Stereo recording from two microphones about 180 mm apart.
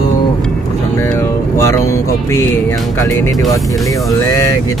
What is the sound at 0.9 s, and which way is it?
Speech, 15° left (ahead or behind).